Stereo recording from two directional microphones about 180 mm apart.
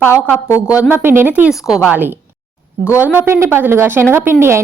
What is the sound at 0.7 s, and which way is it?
A woman's voice, 10° right (ahead or behind).